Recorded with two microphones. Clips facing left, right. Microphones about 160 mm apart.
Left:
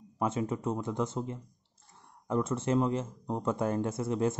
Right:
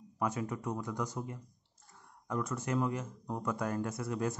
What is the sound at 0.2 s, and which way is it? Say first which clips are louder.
Speech: left 4 dB; 25° left (ahead or behind).